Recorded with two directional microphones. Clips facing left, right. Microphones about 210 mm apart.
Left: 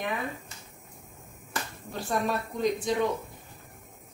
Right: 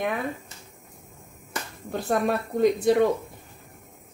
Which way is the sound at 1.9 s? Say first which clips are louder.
Right 5 dB; 55° right (ahead or behind).